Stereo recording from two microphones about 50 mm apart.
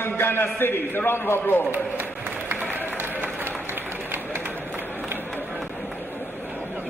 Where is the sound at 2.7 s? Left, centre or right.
Right.